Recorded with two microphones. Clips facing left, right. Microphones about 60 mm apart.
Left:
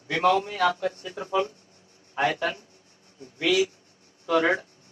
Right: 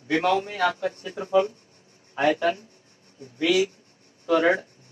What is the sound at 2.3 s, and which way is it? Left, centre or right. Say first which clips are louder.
Speech: right 4 dB; right.